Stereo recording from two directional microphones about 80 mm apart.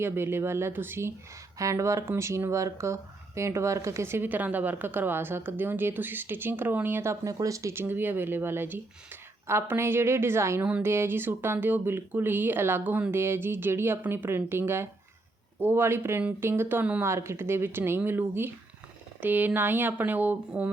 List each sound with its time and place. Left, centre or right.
0.0 s a woman's voice: right